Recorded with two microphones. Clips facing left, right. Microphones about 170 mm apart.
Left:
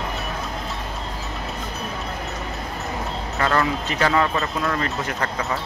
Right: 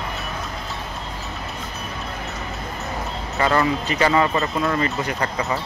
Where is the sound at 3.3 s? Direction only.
5° right (ahead or behind).